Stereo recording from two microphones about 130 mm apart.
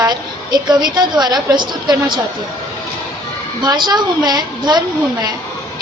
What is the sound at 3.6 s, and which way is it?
A woman's voice, 35° right (ahead or behind).